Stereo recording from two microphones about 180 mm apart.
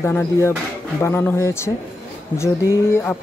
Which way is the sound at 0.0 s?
10° left (ahead or behind).